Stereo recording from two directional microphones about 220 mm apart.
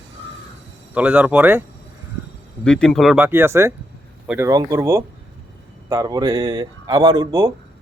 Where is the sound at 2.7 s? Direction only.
5° left (ahead or behind); by 7.5 s 15° right (ahead or behind).